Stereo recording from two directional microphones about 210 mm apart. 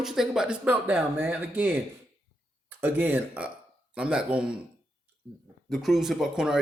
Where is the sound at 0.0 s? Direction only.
Centre (ahead or behind).